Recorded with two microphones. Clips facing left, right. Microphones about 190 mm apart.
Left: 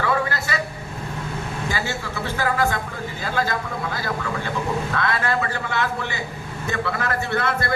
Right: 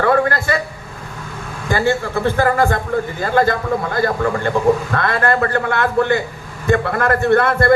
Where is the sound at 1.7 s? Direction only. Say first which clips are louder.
Right 15 dB; 55° right (ahead or behind).